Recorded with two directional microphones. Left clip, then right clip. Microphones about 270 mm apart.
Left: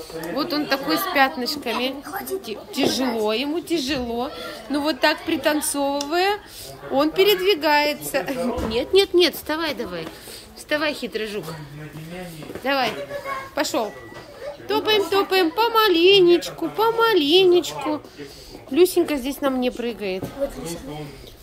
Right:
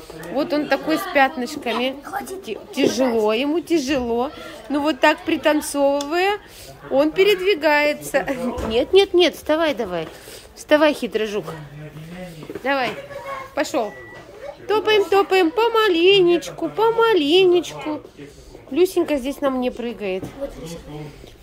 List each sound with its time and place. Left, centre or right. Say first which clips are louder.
0.4 s a woman's voice: right 3 dB; centre
2.0 s a woman's voice: right 3 dB; right
2.4 s a woman's voice: right 4 dB; centre
12.6 s a woman's voice: even; centre
18.8 s a woman's voice: even; centre